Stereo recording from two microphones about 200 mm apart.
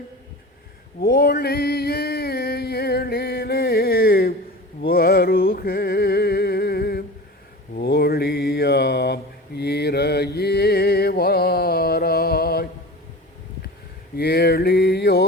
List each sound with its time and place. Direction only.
1.0 s male singing: 50° left (ahead or behind)
4.8 s a sound: 50° left (ahead or behind)
7.8 s mantra: 50° left (ahead or behind)
14.2 s mantra: 55° left (ahead or behind)